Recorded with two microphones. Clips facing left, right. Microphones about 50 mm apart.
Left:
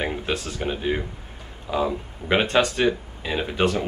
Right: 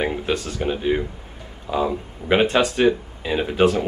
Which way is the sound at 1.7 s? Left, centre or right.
Right.